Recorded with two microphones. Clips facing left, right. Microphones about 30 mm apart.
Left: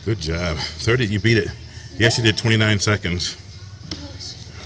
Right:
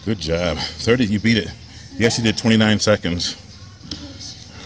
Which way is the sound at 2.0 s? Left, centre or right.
Left.